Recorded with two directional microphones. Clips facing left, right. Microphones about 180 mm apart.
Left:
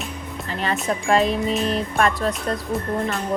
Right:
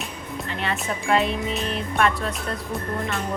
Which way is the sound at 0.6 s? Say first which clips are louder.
Left 5 dB; 40° left (ahead or behind).